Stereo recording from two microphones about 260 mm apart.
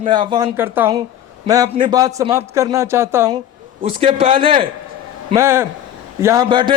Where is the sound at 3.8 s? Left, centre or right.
Right.